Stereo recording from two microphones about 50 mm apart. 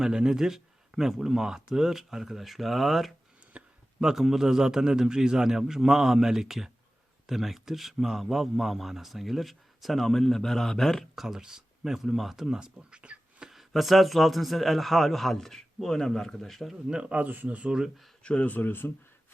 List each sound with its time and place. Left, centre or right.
0.0 s speech: centre
3.5 s a sound: right
4.0 s speech: centre
12.5 s speech: centre
13.5 s speech: centre
16.9 s speech: right
17.6 s speech: centre
18.2 s speech: left